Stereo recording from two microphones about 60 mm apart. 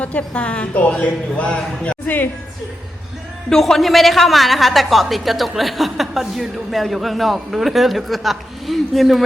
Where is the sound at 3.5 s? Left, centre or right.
Centre.